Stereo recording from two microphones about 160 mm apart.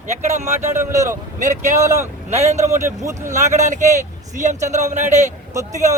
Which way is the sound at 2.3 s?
45° right (ahead or behind).